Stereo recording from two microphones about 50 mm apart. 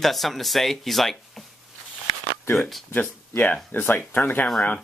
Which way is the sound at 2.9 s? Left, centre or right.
Left.